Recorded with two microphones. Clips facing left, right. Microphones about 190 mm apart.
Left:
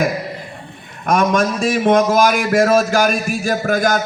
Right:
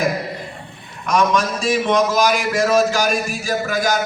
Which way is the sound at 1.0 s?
50° left (ahead or behind).